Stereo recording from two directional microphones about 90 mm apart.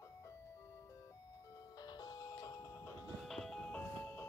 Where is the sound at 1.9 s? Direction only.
45° left (ahead or behind).